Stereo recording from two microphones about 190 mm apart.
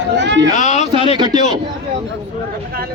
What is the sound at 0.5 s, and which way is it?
Speech, 40° left (ahead or behind).